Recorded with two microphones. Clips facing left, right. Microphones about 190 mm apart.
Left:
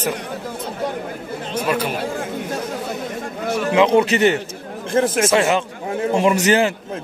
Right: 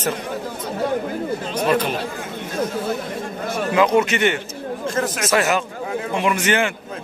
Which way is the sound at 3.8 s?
30° left (ahead or behind).